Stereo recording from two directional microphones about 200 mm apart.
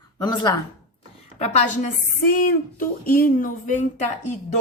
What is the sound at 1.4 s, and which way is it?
Speech, 30° left (ahead or behind).